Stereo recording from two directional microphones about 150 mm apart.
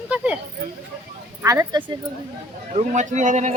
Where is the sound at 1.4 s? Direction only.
20° right (ahead or behind).